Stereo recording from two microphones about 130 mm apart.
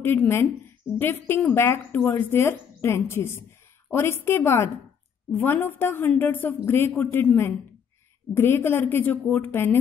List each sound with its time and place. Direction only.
0.0 s a woman's voice: 15° left (ahead or behind)